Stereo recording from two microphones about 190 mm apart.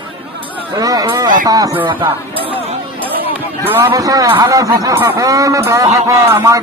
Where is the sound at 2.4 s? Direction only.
30° right (ahead or behind).